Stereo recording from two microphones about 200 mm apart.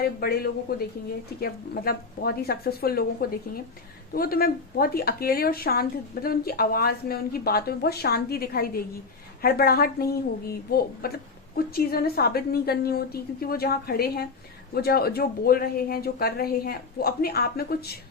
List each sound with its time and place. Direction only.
0.0 s a woman's voice: 50° left (ahead or behind)